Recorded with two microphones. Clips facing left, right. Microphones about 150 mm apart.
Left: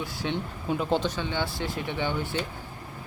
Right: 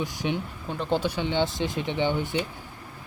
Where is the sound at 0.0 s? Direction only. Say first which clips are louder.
Right 3 dB; 15° right (ahead or behind).